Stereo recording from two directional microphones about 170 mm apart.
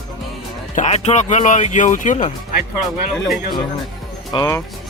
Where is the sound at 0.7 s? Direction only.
40° left (ahead or behind).